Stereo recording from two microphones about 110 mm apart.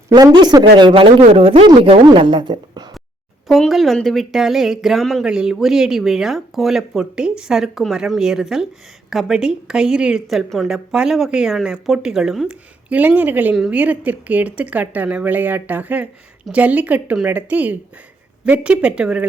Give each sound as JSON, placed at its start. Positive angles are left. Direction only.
{"t": 0.1, "sound": "a woman's voice", "side_deg": -35}
{"t": 3.4, "sound": "speech", "side_deg": 0}
{"t": 12.9, "sound": "speech", "side_deg": -15}